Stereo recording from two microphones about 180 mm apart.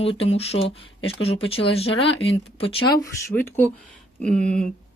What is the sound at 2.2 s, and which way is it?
Speech, 30° left (ahead or behind).